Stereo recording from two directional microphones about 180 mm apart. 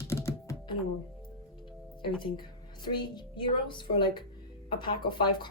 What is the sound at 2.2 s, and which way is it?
A woman's voice, 25° left (ahead or behind).